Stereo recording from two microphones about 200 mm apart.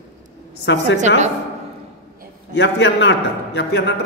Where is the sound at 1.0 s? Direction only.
35° right (ahead or behind).